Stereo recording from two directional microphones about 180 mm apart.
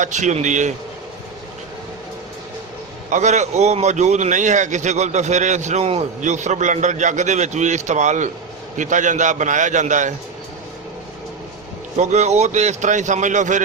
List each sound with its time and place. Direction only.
0.0 s a man's voice: 40° right (ahead or behind)
3.1 s a man's voice: 40° right (ahead or behind)
11.9 s a man's voice: 40° right (ahead or behind)